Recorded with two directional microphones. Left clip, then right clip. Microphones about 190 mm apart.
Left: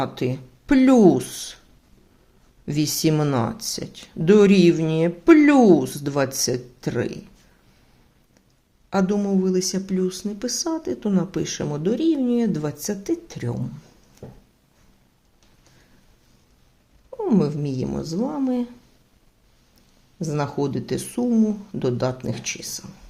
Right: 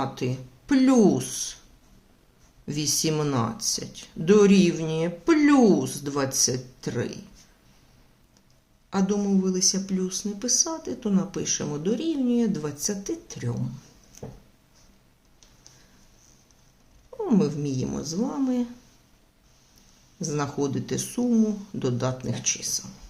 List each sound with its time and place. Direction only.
0.0 s speech: 40° left (ahead or behind)
2.6 s speech: 40° left (ahead or behind)
8.9 s speech: 40° left (ahead or behind)
17.2 s speech: 30° left (ahead or behind)
20.2 s speech: 35° left (ahead or behind)